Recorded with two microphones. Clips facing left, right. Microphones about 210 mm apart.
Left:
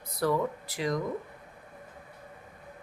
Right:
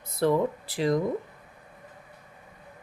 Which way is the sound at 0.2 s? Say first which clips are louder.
Right 4 dB; 30° right (ahead or behind).